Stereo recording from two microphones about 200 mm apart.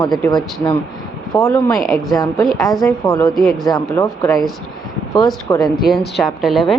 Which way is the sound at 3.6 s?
15° left (ahead or behind).